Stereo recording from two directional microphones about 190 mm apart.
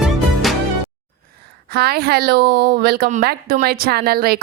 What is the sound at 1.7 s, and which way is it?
A woman's voice, 55° right (ahead or behind).